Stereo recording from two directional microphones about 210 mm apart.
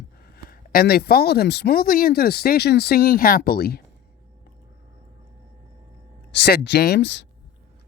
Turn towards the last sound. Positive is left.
turn(degrees=55)  # may be behind; listen again after turning